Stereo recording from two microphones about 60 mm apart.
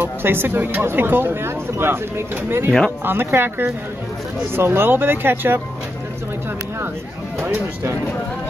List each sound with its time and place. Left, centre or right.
0.0 s speech: right
7.4 s speech: right